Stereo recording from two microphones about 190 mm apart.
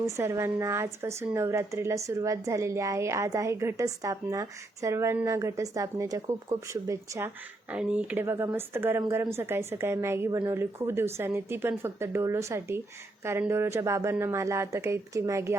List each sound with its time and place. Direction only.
0.0 s a woman's voice: 15° right (ahead or behind)